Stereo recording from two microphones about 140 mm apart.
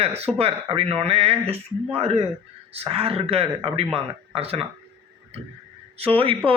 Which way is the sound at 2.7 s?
40° right (ahead or behind).